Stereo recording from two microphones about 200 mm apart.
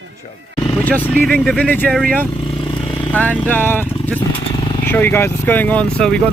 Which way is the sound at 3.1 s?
10° left (ahead or behind).